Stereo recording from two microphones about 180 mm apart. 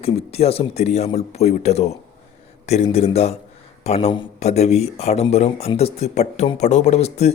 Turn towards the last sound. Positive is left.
turn(degrees=35)  # may be behind; listen again after turning